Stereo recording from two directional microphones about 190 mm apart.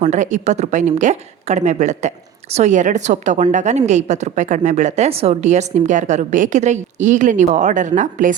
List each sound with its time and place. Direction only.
0.0 s a woman's voice: 40° right (ahead or behind)